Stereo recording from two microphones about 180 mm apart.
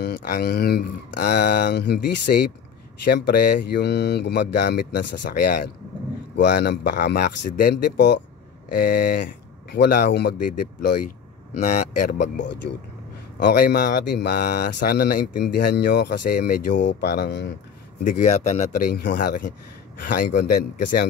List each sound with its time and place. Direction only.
0.0 s speech: 60° left (ahead or behind)
8.7 s speech: 60° left (ahead or behind)
14.4 s speech: 45° left (ahead or behind)
15.5 s speech: 65° left (ahead or behind)
18.0 s speech: 45° left (ahead or behind)
18.8 s speech: 60° left (ahead or behind)